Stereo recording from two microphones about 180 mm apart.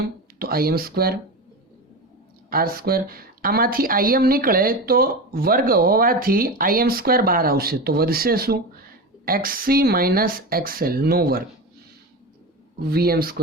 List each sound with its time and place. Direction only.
0.3 s a woman's voice: 55° right (ahead or behind)
2.5 s a woman's voice: 55° right (ahead or behind)
12.8 s a woman's voice: 60° right (ahead or behind)